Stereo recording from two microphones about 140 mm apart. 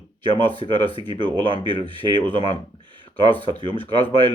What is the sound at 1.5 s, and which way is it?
Speech, 40° left (ahead or behind).